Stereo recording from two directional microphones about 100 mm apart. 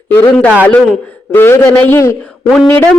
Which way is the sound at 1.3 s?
25° left (ahead or behind).